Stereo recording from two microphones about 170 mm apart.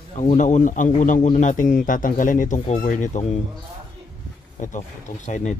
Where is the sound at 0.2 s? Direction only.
45° left (ahead or behind).